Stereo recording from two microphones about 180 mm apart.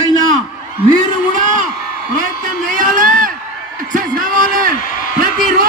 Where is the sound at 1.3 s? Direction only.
45° right (ahead or behind).